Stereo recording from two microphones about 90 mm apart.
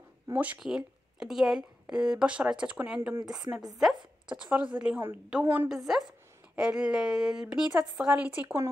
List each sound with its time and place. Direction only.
0.6 s a woman's voice: 5° right (ahead or behind); by 5.7 s 20° right (ahead or behind)
5.7 s a woman's voice: 5° right (ahead or behind)